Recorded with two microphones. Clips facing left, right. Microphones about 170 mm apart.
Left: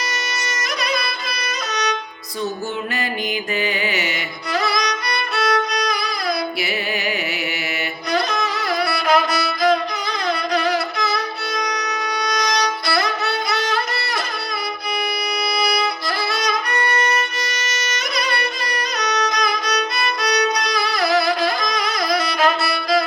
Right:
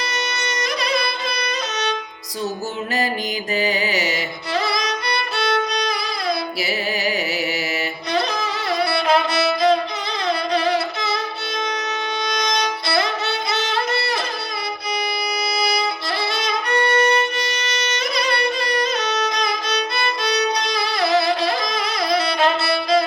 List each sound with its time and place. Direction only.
3.6 s music: 40° right (ahead or behind)
8.1 s music: 30° right (ahead or behind)
12.2 s violin: 25° right (ahead or behind)
15.6 s violin: 25° right (ahead or behind)